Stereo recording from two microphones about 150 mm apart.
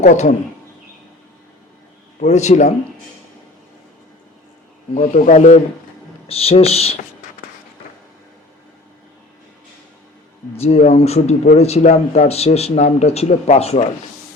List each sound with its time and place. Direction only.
0.0 s a man's voice: 50° left (ahead or behind)
2.2 s a man's voice: 50° left (ahead or behind)
4.9 s a man's voice: 65° left (ahead or behind); by 6.9 s 45° left (ahead or behind)
10.6 s a man's voice: 45° left (ahead or behind)